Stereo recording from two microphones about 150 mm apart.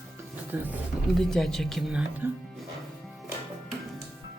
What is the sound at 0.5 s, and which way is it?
Speech, 10° right (ahead or behind).